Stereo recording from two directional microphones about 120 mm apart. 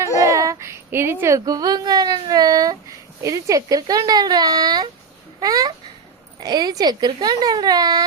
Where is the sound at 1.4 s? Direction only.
30° right (ahead or behind).